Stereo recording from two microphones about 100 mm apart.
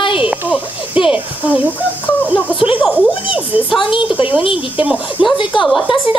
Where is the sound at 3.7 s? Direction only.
55° left (ahead or behind).